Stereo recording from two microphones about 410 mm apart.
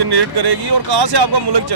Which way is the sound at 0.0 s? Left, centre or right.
Right.